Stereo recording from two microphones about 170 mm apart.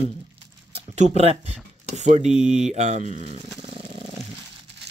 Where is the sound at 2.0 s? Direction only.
40° right (ahead or behind).